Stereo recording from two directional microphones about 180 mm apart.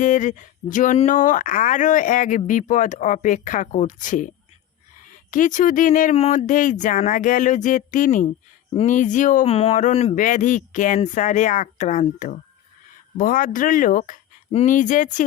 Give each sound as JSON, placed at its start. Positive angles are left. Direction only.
{"t": 0.0, "sound": "speech", "side_deg": 45}
{"t": 5.3, "sound": "speech", "side_deg": 45}
{"t": 8.7, "sound": "speech", "side_deg": 35}
{"t": 9.0, "sound": "speech", "side_deg": 45}